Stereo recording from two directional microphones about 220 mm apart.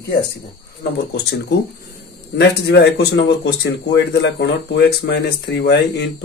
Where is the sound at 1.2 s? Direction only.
50° left (ahead or behind).